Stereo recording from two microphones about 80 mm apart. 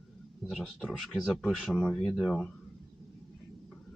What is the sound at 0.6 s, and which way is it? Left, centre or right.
Speech, centre.